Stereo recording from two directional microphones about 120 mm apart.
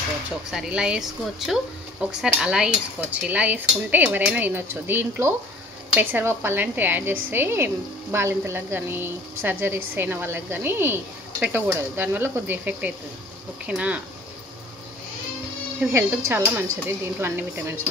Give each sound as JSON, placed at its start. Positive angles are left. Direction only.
{"t": 0.5, "sound": "a woman's voice", "side_deg": -5}
{"t": 15.9, "sound": "speech", "side_deg": -20}